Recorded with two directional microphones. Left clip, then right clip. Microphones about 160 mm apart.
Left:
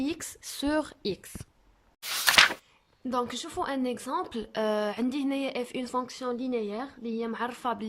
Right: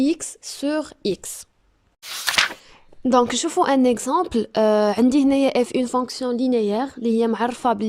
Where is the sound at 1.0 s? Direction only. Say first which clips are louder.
Right 9 dB; 20° right (ahead or behind).